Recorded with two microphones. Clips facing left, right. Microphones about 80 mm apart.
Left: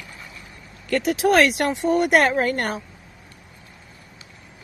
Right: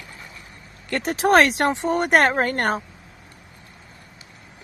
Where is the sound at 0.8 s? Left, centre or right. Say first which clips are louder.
Left 1 dB; right.